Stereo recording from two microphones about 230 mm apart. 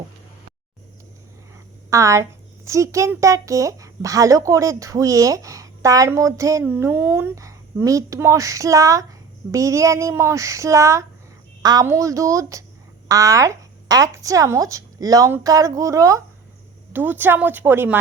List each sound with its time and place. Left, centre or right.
1.9 s a child's voice: centre